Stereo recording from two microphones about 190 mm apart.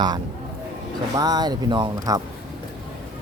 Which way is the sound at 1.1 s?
20° right (ahead or behind).